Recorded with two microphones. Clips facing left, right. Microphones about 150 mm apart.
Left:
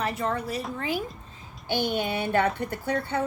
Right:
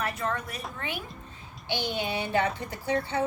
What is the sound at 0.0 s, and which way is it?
A woman's voice, 25° left (ahead or behind).